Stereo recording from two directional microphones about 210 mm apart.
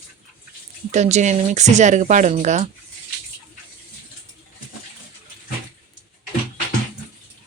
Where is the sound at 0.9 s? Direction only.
35° right (ahead or behind).